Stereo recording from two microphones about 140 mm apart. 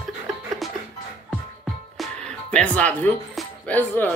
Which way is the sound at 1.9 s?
5° left (ahead or behind).